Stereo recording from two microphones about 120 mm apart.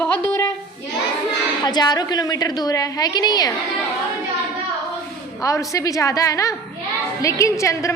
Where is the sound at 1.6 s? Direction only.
35° left (ahead or behind).